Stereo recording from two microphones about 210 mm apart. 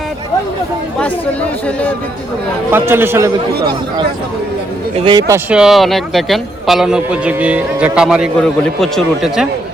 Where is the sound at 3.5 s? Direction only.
50° right (ahead or behind).